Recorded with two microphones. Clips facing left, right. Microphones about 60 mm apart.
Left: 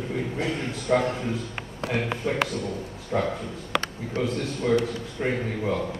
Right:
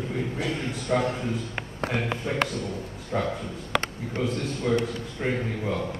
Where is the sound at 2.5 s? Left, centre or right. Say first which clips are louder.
Left 1 dB; left.